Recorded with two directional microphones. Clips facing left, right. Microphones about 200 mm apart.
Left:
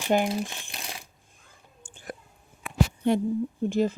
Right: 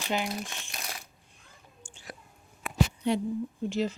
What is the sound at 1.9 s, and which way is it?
Whispering, 55° left (ahead or behind).